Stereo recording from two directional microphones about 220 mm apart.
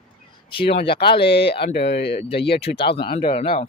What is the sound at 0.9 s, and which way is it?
Speech, 45° left (ahead or behind).